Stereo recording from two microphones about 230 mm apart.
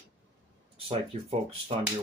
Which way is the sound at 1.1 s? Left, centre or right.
Right.